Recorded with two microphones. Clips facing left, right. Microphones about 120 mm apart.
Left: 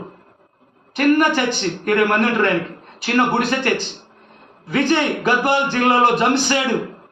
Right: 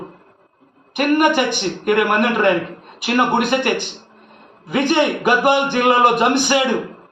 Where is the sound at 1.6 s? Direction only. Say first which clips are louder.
Right 1 dB; 15° right (ahead or behind).